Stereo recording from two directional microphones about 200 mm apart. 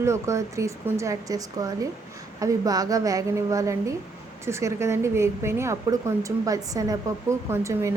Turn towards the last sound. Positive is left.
turn(degrees=-15)  # may be behind; listen again after turning